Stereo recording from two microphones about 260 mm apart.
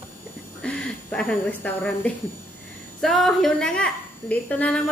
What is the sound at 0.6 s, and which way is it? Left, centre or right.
Speech, centre.